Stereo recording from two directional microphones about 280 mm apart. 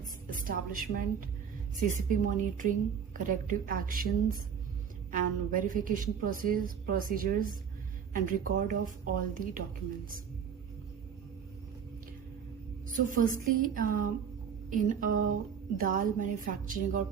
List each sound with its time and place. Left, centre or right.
0.0 s a woman's voice: right
5.1 s a woman's voice: right
12.9 s a woman's voice: right